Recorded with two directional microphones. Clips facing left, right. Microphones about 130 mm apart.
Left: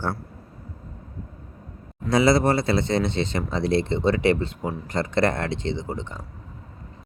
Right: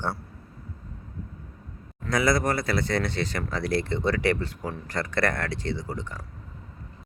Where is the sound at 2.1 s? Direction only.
25° left (ahead or behind).